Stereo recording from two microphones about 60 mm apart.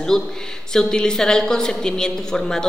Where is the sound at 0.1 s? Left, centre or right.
Centre.